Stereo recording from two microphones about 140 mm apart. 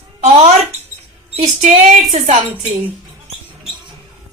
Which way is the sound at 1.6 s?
60° right (ahead or behind).